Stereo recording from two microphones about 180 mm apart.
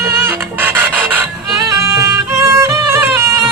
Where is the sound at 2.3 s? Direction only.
15° right (ahead or behind).